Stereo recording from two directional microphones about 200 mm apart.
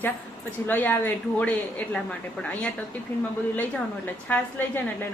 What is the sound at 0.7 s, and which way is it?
A woman's voice, 10° left (ahead or behind).